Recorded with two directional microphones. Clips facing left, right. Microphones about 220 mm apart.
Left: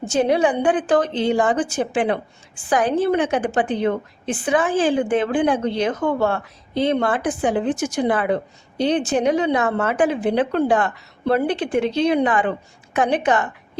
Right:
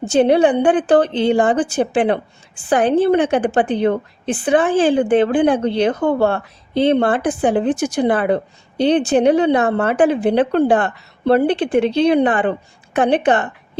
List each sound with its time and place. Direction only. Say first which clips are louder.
0.1 s a woman's voice: right 5 dB; 30° right (ahead or behind)